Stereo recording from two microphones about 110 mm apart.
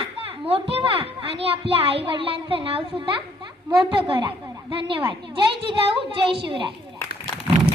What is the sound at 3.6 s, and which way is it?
A woman's voice, 45° right (ahead or behind).